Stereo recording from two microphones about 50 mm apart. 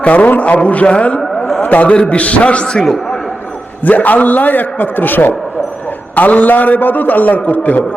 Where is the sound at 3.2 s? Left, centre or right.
Centre.